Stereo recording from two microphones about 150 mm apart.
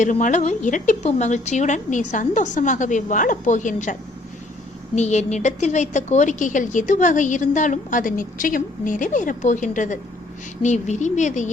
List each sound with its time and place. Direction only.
0.0 s a woman's voice: 55° left (ahead or behind)
4.9 s a woman's voice: 50° left (ahead or behind)